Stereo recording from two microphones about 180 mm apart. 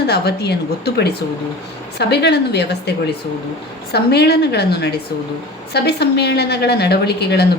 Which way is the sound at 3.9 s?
65° left (ahead or behind).